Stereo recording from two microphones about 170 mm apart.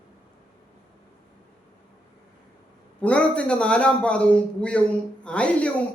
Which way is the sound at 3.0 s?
5° left (ahead or behind).